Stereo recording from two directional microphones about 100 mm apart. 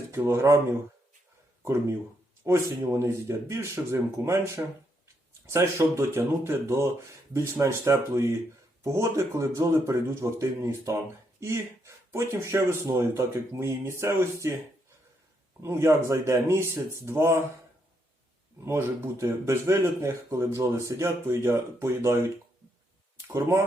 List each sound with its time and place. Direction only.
0.1 s speech: 25° right (ahead or behind)
2.4 s a man's voice: 25° right (ahead or behind)
15.6 s a man's voice: 25° right (ahead or behind)
18.6 s a man's voice: 25° right (ahead or behind)